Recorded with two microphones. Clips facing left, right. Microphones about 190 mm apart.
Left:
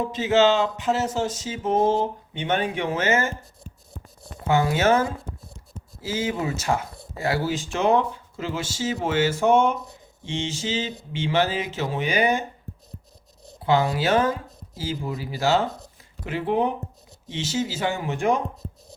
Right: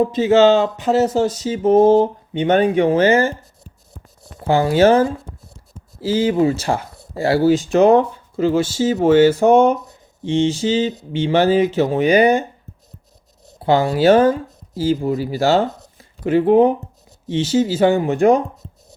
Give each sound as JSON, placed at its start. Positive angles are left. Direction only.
{"t": 0.0, "sound": "speech", "side_deg": -35}
{"t": 0.4, "sound": "speech", "side_deg": -45}
{"t": 4.4, "sound": "speech", "side_deg": -35}
{"t": 13.7, "sound": "speech", "side_deg": -35}